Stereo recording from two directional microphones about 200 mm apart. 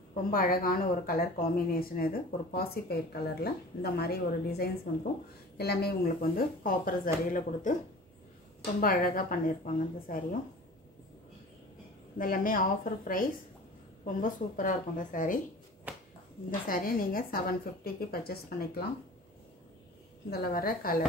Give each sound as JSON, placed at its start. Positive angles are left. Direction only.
{"t": 0.1, "sound": "a woman's voice", "side_deg": 45}
{"t": 8.8, "sound": "a woman's voice", "side_deg": 45}
{"t": 12.2, "sound": "a woman's voice", "side_deg": 45}
{"t": 15.9, "sound": "a sound", "side_deg": -10}
{"t": 16.4, "sound": "a woman's voice", "side_deg": 45}
{"t": 20.2, "sound": "a woman's voice", "side_deg": 50}